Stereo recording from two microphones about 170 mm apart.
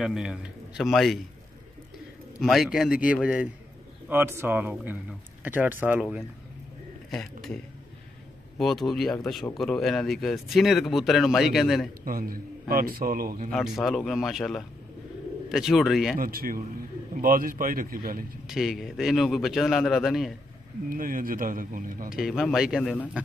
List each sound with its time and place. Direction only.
0.0 s speech: 5° right (ahead or behind)
2.4 s speech: centre (ahead or behind)
12.0 s a man's voice: 55° right (ahead or behind)
13.5 s speech: centre (ahead or behind)
16.2 s a man's voice: 60° right (ahead or behind)
18.5 s speech: centre (ahead or behind)
20.9 s a man's voice: 55° right (ahead or behind)
22.1 s speech: centre (ahead or behind)